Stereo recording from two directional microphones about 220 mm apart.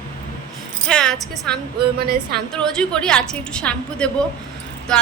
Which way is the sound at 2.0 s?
45° right (ahead or behind).